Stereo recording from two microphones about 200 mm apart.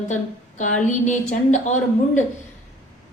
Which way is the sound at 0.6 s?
40° left (ahead or behind).